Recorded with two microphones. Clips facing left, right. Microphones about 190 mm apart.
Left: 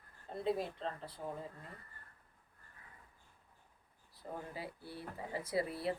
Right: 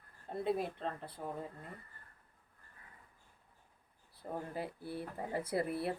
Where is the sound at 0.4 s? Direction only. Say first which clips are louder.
Right 1 dB; 60° right (ahead or behind).